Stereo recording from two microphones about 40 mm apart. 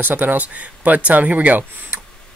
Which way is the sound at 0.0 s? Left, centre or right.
Right.